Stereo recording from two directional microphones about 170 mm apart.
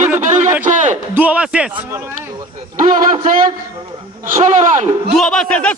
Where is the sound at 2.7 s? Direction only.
50° right (ahead or behind).